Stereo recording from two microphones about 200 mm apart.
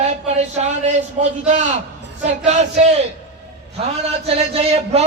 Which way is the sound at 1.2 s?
35° right (ahead or behind).